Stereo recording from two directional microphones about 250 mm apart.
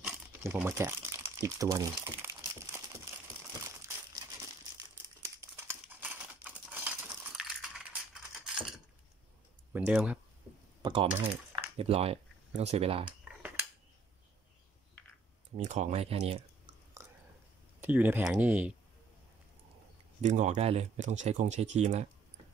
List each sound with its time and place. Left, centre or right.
0.0 s crumpling: centre
9.7 s speech: centre
10.8 s speech: right
15.5 s speech: right
17.7 s speech: centre
20.2 s speech: right